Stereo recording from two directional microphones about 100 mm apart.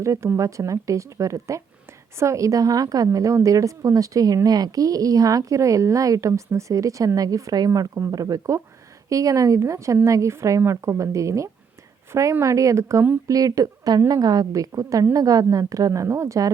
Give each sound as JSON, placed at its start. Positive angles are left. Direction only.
{"t": 0.0, "sound": "speech", "side_deg": -30}